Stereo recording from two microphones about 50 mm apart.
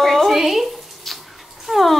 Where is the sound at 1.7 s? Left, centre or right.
Centre.